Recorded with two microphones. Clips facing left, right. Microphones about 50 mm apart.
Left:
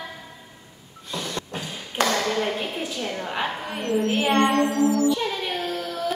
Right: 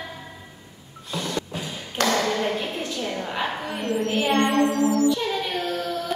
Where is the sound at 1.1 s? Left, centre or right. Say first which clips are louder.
Right 2 dB; centre.